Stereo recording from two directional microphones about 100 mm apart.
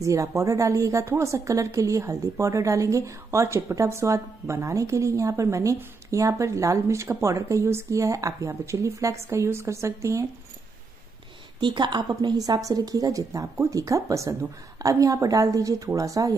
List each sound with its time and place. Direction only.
0.0 s a woman's voice: 35° right (ahead or behind)
11.6 s a woman's voice: 50° right (ahead or behind)